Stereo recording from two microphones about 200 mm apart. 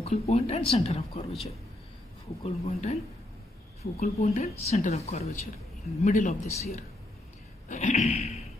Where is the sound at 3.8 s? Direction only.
45° left (ahead or behind).